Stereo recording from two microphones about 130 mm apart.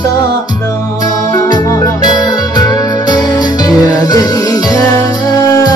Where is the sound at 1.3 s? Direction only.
30° left (ahead or behind).